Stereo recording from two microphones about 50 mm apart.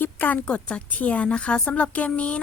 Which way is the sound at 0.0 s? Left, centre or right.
Left.